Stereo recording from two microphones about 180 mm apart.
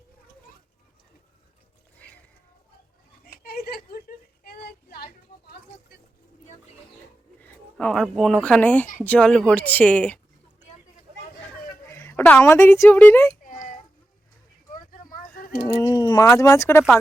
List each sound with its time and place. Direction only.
3.4 s a sound: 55° left (ahead or behind)
4.4 s child singing: 60° left (ahead or behind)
7.4 s speech: 5° left (ahead or behind)
11.9 s speech: 10° left (ahead or behind)
14.8 s a sound: 50° left (ahead or behind)
15.9 s speech: 25° left (ahead or behind)